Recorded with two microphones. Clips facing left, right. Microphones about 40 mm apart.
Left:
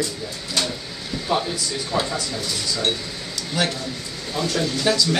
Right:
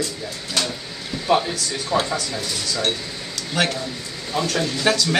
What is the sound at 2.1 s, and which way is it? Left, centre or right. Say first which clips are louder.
Speech: right 1 dB; centre.